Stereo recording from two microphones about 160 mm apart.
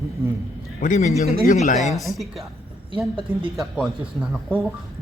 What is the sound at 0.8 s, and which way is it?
A man's voice, 50° left (ahead or behind).